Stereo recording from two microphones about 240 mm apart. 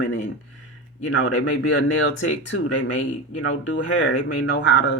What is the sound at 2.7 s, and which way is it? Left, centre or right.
Speech, left.